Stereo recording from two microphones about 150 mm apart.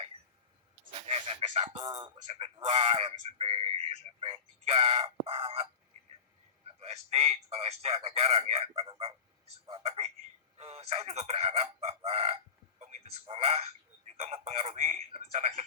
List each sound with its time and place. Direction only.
0.9 s a sound: 40° right (ahead or behind)
2.2 s speech: 40° right (ahead or behind)
6.7 s speech: 45° right (ahead or behind)